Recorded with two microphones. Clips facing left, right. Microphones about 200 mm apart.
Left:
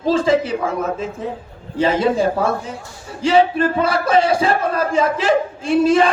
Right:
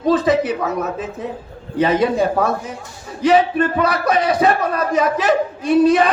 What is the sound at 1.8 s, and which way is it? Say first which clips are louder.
Speech: even; 30° left (ahead or behind).